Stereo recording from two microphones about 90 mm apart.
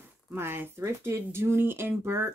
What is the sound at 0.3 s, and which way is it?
A woman's voice, 25° right (ahead or behind).